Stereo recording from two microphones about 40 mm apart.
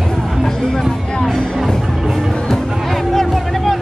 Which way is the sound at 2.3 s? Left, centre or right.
Centre.